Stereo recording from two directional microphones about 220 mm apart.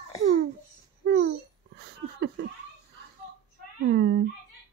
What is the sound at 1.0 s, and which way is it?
Babbling, 45° right (ahead or behind).